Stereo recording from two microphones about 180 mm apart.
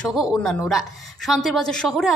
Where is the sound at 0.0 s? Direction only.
Centre (ahead or behind).